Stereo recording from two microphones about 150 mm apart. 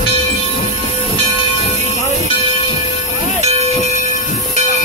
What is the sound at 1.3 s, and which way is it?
Train, 45° left (ahead or behind).